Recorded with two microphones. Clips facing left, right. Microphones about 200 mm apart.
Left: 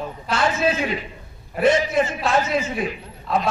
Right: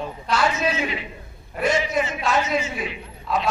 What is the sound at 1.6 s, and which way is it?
A man's voice, 50° left (ahead or behind).